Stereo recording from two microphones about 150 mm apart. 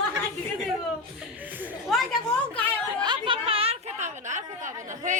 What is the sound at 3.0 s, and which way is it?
A woman's voice, 30° right (ahead or behind).